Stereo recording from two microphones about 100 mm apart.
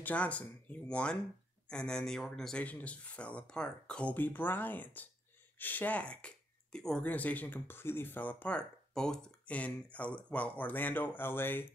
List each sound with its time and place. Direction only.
0.0 s speech: 15° left (ahead or behind)